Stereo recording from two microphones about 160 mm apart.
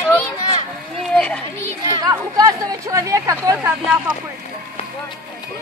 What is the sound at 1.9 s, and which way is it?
Speech, 25° right (ahead or behind).